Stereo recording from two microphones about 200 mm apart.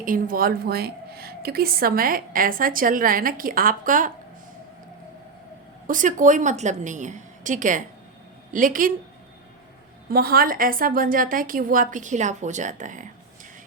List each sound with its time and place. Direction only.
0.0 s speech: 45° right (ahead or behind)
5.9 s a woman's voice: 40° right (ahead or behind)
10.1 s speech: 50° right (ahead or behind)